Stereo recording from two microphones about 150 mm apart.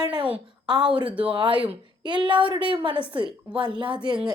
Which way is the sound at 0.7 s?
30° right (ahead or behind).